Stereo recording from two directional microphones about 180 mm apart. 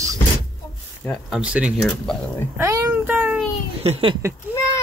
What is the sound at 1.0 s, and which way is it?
Speech, centre (ahead or behind).